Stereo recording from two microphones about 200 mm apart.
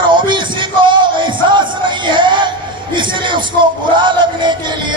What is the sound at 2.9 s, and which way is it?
Music, 25° right (ahead or behind).